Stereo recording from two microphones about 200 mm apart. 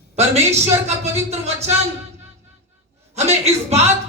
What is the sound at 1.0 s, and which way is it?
Speech, 35° right (ahead or behind).